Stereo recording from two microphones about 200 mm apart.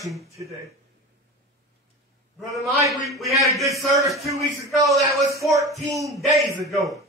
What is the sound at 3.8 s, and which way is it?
Speech, centre (ahead or behind).